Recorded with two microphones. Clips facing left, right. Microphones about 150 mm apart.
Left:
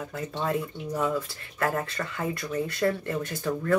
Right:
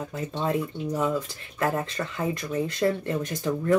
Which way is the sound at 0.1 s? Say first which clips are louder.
Right 1 dB; 20° right (ahead or behind).